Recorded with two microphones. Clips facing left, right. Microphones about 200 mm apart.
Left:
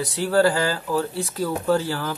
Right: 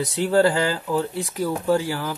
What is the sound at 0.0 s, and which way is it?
Speech, 20° right (ahead or behind).